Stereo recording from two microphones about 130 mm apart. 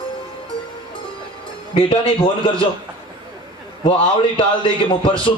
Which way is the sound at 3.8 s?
45° left (ahead or behind).